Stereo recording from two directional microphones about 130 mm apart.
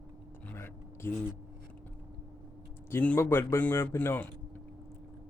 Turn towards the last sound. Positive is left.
turn(degrees=15)  # may be behind; listen again after turning